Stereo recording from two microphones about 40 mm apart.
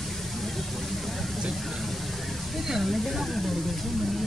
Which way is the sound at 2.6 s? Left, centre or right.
Centre.